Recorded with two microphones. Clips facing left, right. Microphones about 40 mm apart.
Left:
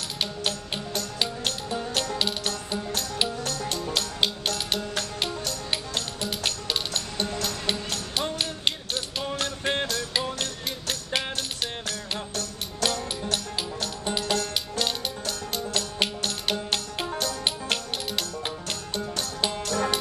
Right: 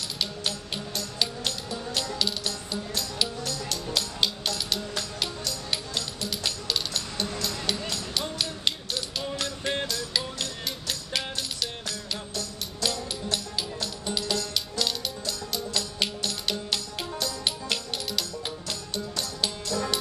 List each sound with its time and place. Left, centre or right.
1.2 s music: left
3.6 s music: left
9.4 s music: left
12.8 s music: left
13.2 s music: left
15.2 s music: left
19.6 s music: left